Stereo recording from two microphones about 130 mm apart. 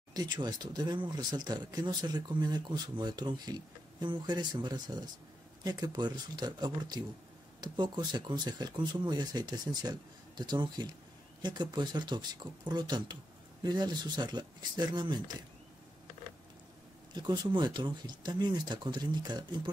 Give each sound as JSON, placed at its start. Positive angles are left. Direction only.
{"t": 0.1, "sound": "speech", "side_deg": -30}
{"t": 17.1, "sound": "speech", "side_deg": -35}